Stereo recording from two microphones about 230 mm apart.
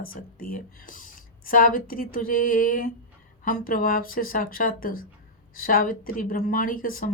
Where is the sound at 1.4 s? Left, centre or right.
Left.